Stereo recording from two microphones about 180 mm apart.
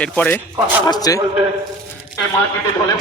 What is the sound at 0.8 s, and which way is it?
Speech, 20° left (ahead or behind).